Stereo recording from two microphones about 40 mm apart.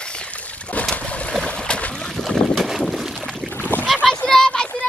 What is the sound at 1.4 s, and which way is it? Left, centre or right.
Boat, left.